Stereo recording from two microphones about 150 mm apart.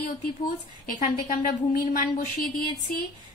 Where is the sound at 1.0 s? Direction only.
55° left (ahead or behind).